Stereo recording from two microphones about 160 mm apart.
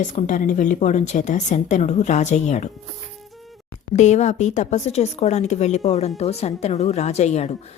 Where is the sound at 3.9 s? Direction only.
45° left (ahead or behind).